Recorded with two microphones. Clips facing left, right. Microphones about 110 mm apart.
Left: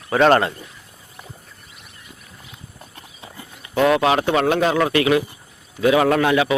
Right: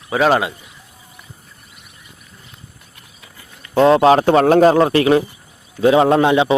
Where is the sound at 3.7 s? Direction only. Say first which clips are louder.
Right 6 dB; 30° right (ahead or behind).